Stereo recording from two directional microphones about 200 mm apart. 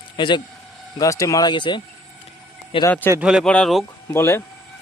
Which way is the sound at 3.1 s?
5° right (ahead or behind).